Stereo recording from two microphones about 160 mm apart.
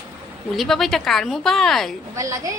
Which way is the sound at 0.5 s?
Centre (ahead or behind).